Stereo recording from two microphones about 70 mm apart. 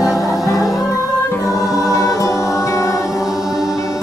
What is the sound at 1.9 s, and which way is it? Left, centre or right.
Music, left.